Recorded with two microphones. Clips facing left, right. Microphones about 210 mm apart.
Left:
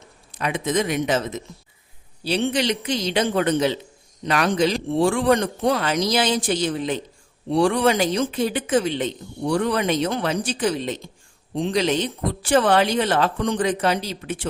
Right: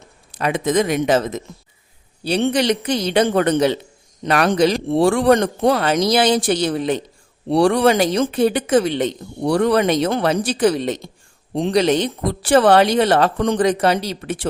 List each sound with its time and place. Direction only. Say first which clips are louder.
0.3 s speech: right 5 dB; 50° right (ahead or behind)
2.2 s speech: right 4 dB; 55° right (ahead or behind)